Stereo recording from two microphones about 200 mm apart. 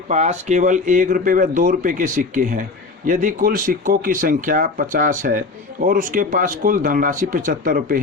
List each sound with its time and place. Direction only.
0.1 s speech: 35° right (ahead or behind)